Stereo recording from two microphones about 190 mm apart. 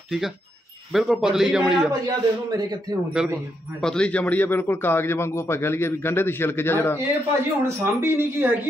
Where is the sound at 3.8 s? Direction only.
5° left (ahead or behind).